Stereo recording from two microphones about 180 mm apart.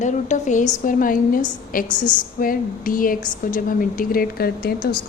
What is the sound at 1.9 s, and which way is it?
Speech, 25° left (ahead or behind).